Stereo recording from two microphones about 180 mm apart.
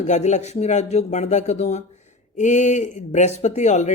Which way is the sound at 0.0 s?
40° left (ahead or behind).